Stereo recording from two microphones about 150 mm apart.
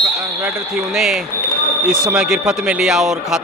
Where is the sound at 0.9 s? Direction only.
Centre (ahead or behind).